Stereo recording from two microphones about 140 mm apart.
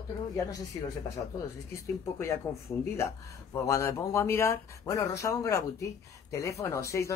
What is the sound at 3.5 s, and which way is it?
Speech, 20° left (ahead or behind).